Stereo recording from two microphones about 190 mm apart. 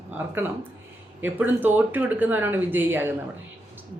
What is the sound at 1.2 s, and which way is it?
A woman's voice, 10° right (ahead or behind).